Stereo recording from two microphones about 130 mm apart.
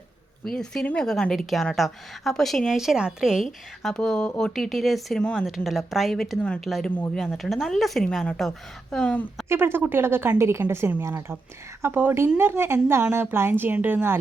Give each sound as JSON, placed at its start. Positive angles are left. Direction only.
{"t": 0.4, "sound": "speech", "side_deg": 5}
{"t": 9.5, "sound": "a woman's voice", "side_deg": -20}